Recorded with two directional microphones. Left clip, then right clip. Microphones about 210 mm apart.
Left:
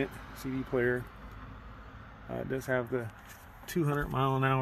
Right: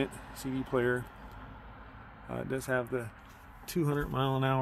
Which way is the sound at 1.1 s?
60° left (ahead or behind).